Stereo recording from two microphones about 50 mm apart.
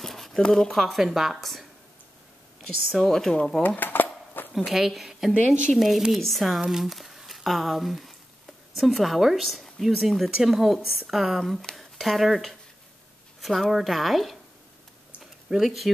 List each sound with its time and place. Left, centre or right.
0.0 s a sound: centre
0.5 s speech: centre
1.0 s speech: centre
3.6 s dishes: left
4.6 s a woman's voice: centre
15.5 s speech: centre